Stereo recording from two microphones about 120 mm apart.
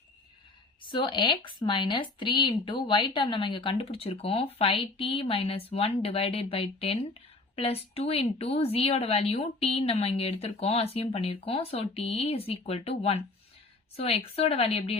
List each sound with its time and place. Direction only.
0.9 s speech: 45° left (ahead or behind)